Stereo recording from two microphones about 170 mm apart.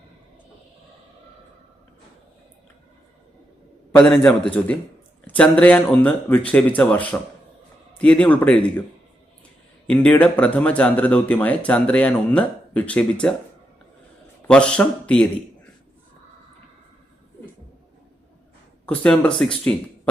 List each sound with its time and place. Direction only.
4.1 s speech: 5° left (ahead or behind)
9.8 s speech: 5° left (ahead or behind)
14.4 s speech: 5° left (ahead or behind)
18.9 s speech: 5° left (ahead or behind)